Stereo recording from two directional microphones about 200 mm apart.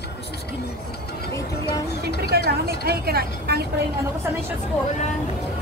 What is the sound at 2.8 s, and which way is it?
Vehicle, 50° right (ahead or behind).